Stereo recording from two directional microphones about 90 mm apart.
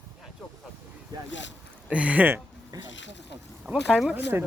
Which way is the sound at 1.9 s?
15° right (ahead or behind).